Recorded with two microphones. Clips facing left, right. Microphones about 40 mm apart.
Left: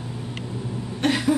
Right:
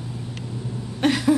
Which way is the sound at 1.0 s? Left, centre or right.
Centre.